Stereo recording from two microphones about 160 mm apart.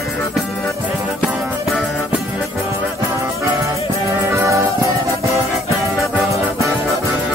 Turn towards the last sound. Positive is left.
turn(degrees=-20)  # may be behind; listen again after turning